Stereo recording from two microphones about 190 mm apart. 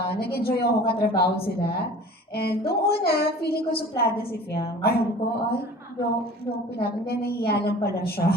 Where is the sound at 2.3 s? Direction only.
55° left (ahead or behind).